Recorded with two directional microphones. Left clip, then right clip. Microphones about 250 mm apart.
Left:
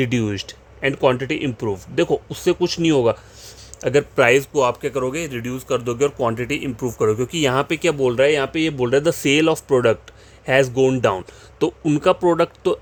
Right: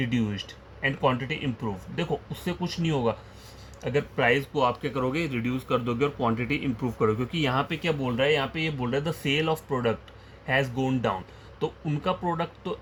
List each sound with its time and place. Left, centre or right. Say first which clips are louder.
0.0 s speech: left 8 dB; left